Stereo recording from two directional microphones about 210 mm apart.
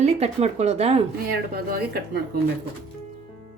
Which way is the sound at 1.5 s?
45° right (ahead or behind).